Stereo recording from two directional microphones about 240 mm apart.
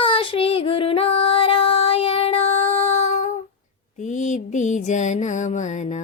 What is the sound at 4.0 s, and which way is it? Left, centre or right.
Mantra, left.